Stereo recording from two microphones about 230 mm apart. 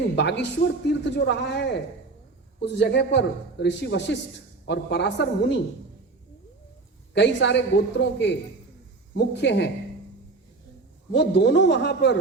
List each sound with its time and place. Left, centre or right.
0.2 s a man's voice: left
7.1 s a man's voice: left
11.1 s a man's voice: left